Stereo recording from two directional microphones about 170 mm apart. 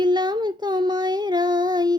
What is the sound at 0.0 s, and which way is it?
Child singing, 25° right (ahead or behind).